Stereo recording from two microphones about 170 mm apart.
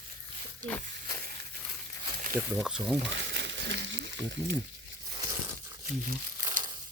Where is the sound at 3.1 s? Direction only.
90° right.